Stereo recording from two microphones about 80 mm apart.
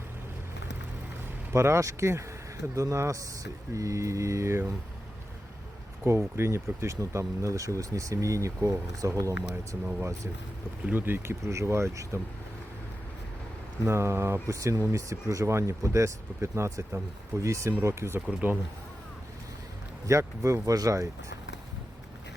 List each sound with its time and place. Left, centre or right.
1.5 s speech: right
6.1 s speech: right
10.9 s speech: right
13.8 s speech: right
18.3 s speech: centre
20.1 s speech: right